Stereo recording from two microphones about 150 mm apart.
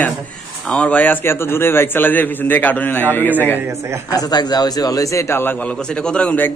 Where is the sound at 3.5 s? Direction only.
15° right (ahead or behind).